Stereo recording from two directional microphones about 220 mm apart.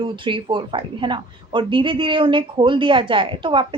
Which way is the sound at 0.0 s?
20° right (ahead or behind).